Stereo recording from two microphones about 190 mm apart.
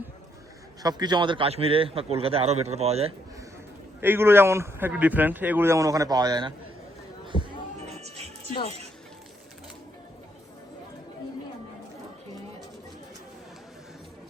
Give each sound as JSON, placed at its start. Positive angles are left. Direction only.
{"t": 0.8, "sound": "a man's voice", "side_deg": -20}
{"t": 4.0, "sound": "a man's voice", "side_deg": -10}
{"t": 7.3, "sound": "a sound", "side_deg": 25}
{"t": 7.9, "sound": "music", "side_deg": -35}